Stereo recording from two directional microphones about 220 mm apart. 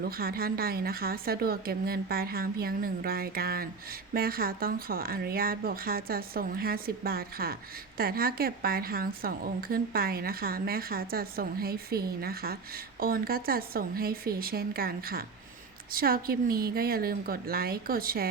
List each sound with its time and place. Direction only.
0.1 s a woman's voice: 45° right (ahead or behind)